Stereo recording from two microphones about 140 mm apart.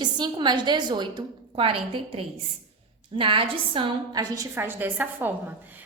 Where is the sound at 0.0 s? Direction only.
30° right (ahead or behind).